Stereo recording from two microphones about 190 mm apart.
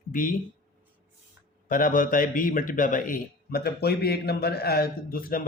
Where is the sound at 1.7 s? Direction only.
45° left (ahead or behind).